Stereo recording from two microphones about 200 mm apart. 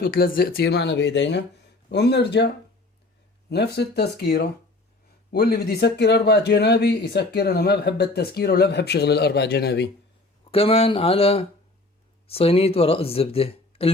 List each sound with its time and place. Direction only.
0.0 s speech: 45° left (ahead or behind)
3.5 s speech: 55° left (ahead or behind)
10.5 s speech: 30° left (ahead or behind)